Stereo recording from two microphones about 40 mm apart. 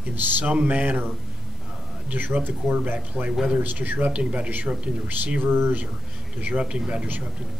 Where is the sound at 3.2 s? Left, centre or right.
Centre.